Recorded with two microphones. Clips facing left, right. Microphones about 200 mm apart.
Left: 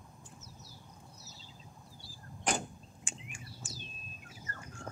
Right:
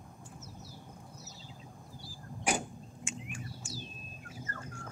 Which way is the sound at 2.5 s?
10° right (ahead or behind).